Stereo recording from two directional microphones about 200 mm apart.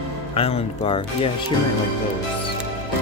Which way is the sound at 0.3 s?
30° left (ahead or behind).